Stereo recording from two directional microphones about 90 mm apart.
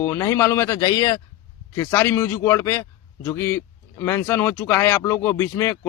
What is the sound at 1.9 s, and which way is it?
Speech, 20° left (ahead or behind).